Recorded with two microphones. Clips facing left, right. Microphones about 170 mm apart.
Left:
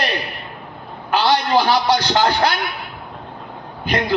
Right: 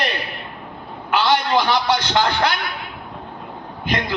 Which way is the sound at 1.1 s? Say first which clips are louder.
Left 1 dB; 35° left (ahead or behind).